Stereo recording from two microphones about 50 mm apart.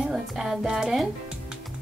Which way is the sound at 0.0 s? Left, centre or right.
Centre.